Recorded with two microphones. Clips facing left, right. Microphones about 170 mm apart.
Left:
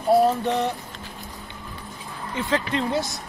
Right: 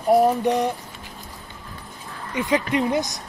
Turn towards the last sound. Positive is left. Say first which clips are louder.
# right 3 dB
turn(degrees=-15)  # may be behind; listen again after turning